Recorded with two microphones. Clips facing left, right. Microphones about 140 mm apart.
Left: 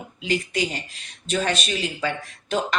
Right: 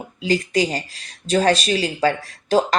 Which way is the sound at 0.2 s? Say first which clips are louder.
Right 5 dB; 35° right (ahead or behind).